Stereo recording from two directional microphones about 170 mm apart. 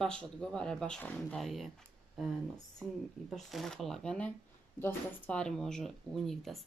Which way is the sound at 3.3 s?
Centre (ahead or behind).